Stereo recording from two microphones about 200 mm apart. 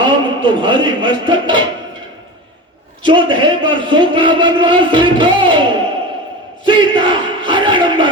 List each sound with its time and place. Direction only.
0.0 s speech: 25° right (ahead or behind)
3.0 s a man's voice: 25° right (ahead or behind)
6.7 s a sound: 25° right (ahead or behind)